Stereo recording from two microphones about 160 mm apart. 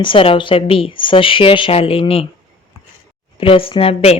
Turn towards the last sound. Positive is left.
turn(degrees=40)  # may be behind; listen again after turning